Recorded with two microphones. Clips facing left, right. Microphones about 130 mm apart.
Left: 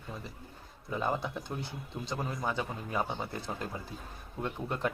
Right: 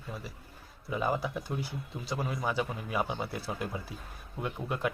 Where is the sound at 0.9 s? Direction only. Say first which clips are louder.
Right 2 dB; 5° right (ahead or behind).